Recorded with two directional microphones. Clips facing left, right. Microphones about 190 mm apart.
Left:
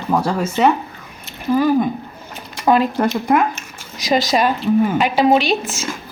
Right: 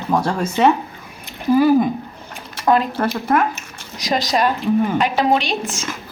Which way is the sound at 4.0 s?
Centre (ahead or behind).